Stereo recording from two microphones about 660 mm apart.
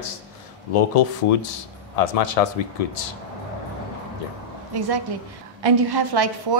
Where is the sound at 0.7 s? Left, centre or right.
Left.